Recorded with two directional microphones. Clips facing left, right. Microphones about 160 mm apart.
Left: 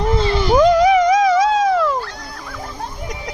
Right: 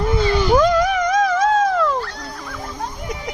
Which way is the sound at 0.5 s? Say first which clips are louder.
Left 6 dB; 15° left (ahead or behind).